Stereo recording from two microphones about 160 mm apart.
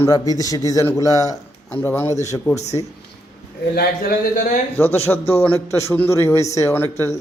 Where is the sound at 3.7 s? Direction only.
70° left (ahead or behind).